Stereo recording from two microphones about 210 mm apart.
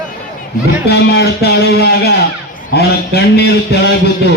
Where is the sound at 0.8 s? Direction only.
50° left (ahead or behind).